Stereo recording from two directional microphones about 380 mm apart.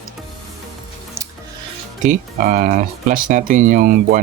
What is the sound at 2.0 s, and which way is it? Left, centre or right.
Speech, centre.